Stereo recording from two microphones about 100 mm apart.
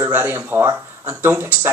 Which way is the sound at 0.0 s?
25° right (ahead or behind).